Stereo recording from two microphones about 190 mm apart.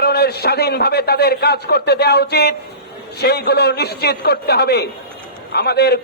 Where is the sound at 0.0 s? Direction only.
55° left (ahead or behind).